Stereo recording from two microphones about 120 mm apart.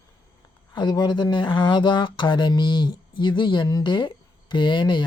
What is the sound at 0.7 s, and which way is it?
Speech, 35° left (ahead or behind).